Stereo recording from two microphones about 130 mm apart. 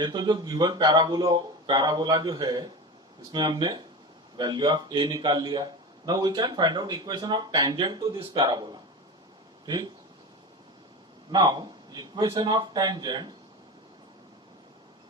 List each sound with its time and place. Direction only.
0.0 s a man's voice: 35° right (ahead or behind)
11.3 s a man's voice: 30° right (ahead or behind)